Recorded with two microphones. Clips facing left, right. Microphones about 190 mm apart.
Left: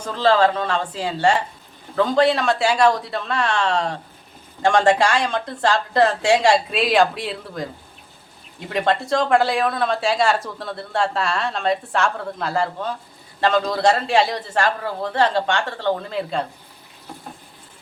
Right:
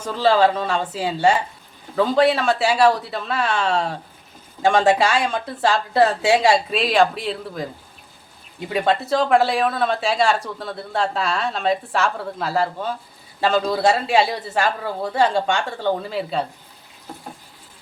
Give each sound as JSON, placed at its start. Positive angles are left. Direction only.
{"t": 0.0, "sound": "a man's voice", "side_deg": -10}
{"t": 8.7, "sound": "a man's voice", "side_deg": -5}